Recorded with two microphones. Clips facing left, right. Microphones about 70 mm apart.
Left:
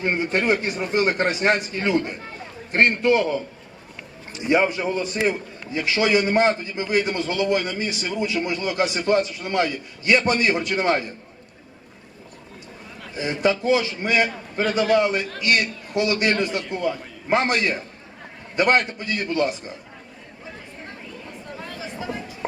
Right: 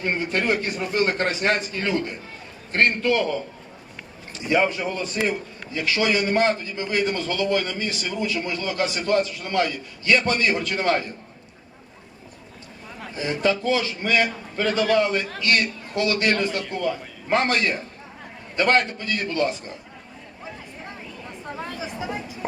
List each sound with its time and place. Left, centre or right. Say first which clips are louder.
0.0 s a man's voice: left 2 dB; left
4.4 s a man's voice: left 2 dB; left
13.1 s a man's voice: left 1 dB; left
21.8 s a sound: left 2 dB; centre